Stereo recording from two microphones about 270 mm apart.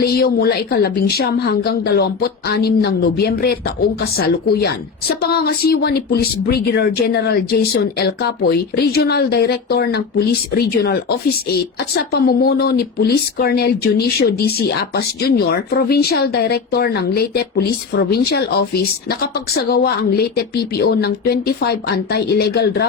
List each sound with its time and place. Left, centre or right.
0.0 s speech: left
11.9 s speech: left